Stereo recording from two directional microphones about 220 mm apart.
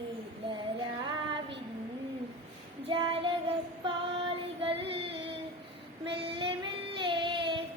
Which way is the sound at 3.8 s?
25° right (ahead or behind).